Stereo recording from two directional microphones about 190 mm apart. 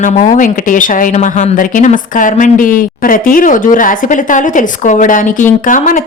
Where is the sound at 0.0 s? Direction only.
45° left (ahead or behind).